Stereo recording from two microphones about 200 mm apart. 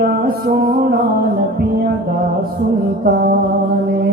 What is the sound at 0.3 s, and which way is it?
Mantra, 50° right (ahead or behind).